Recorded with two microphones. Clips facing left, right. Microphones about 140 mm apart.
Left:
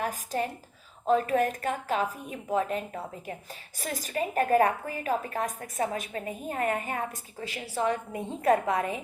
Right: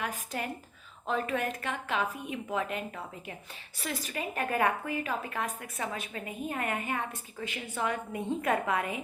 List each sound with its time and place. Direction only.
0.0 s a woman's voice: 40° left (ahead or behind)